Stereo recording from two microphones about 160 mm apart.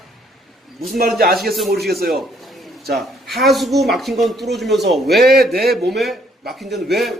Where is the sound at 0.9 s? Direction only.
70° right (ahead or behind).